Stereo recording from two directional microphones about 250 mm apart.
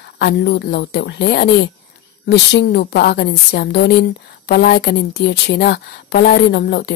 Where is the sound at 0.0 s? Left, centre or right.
Left.